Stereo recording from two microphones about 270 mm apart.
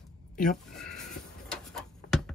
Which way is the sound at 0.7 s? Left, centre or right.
Centre.